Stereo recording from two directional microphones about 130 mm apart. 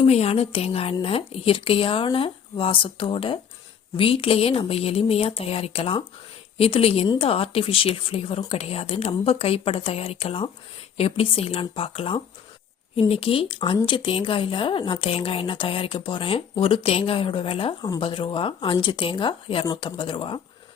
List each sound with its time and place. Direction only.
0.0 s a woman's voice: 50° left (ahead or behind)